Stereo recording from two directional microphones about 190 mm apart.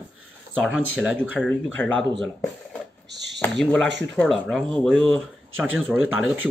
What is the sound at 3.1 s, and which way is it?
Speech, 65° right (ahead or behind).